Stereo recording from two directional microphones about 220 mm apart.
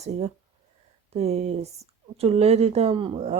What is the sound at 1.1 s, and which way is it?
Speech, 30° right (ahead or behind).